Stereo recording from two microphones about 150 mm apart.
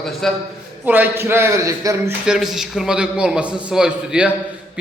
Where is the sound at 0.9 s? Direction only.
10° right (ahead or behind).